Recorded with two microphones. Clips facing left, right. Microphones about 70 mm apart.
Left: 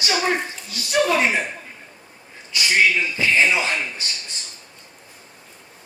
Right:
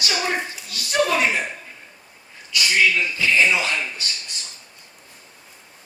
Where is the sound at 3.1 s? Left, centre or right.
Left.